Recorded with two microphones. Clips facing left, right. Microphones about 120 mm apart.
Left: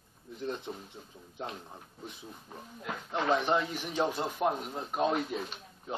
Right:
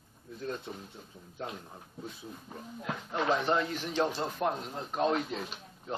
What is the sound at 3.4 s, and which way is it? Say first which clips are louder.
Speech: even; 15° left (ahead or behind).